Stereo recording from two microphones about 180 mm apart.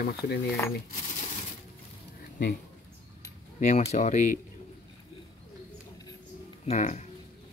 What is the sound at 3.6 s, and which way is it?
Speech, 40° left (ahead or behind).